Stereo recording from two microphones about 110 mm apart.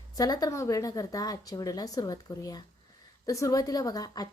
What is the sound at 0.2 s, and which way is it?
A woman's voice, 35° left (ahead or behind).